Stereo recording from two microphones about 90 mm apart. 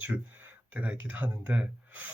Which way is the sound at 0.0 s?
20° right (ahead or behind).